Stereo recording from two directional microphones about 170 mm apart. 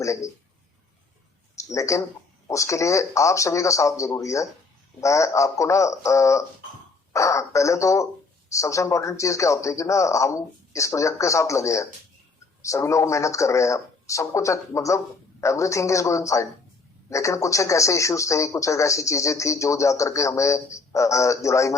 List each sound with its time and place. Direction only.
0.0 s a man's voice: 20° left (ahead or behind)
1.5 s speech: 20° left (ahead or behind)